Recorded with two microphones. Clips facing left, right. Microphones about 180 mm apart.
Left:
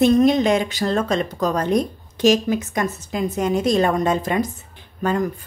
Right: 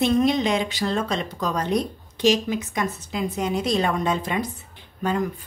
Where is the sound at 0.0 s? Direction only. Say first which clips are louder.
Left 5 dB; 45° left (ahead or behind).